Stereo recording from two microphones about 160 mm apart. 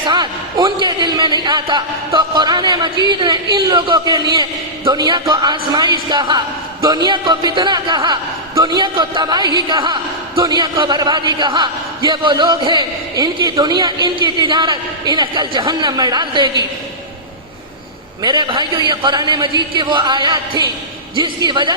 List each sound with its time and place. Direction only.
0.1 s a man's voice: 30° right (ahead or behind)
18.2 s a man's voice: 30° right (ahead or behind)